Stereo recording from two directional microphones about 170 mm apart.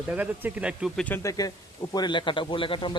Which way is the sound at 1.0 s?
15° left (ahead or behind).